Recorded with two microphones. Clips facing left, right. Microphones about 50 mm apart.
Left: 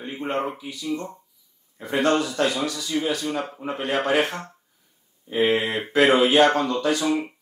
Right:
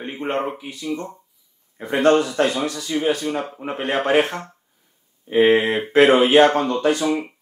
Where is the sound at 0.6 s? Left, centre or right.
Right.